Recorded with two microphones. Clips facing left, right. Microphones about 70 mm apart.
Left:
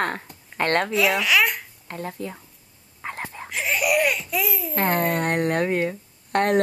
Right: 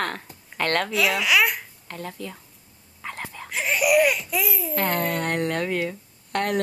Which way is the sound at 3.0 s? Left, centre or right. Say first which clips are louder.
Left 2 dB; left.